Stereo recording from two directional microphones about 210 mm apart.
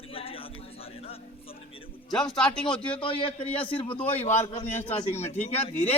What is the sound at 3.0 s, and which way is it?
A man's voice, 25° left (ahead or behind).